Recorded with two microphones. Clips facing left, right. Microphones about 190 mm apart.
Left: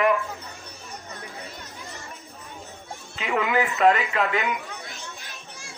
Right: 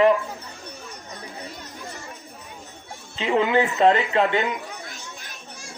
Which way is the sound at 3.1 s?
30° right (ahead or behind).